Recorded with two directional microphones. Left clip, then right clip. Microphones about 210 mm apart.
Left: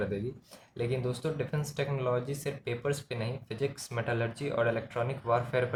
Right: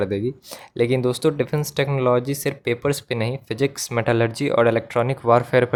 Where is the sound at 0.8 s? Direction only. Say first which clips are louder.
Right 14 dB; 55° right (ahead or behind).